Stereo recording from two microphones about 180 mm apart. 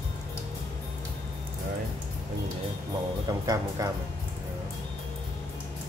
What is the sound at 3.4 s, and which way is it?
Speech, 20° right (ahead or behind).